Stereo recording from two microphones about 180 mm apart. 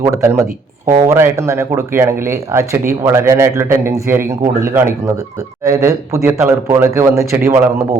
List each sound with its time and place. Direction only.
0.0 s speech: 15° right (ahead or behind)